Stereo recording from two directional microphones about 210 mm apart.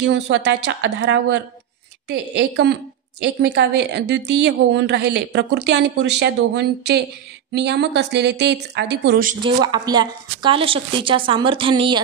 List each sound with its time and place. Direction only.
0.0 s a woman's voice: 55° right (ahead or behind)
9.4 s a woman's voice: 20° right (ahead or behind)